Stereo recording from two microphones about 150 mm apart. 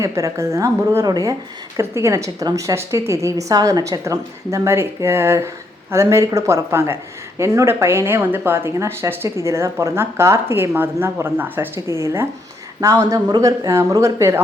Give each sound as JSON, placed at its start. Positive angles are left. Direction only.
{"t": 0.0, "sound": "a woman's voice", "side_deg": -20}